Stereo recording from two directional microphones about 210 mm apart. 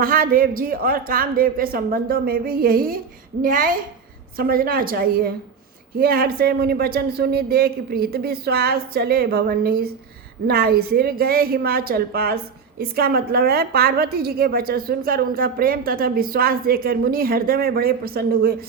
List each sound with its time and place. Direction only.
0.0 s a woman's voice: 40° right (ahead or behind)